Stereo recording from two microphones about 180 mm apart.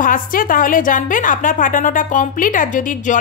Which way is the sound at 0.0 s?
50° left (ahead or behind).